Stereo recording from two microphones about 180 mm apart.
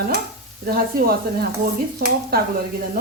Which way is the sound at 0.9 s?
55° right (ahead or behind).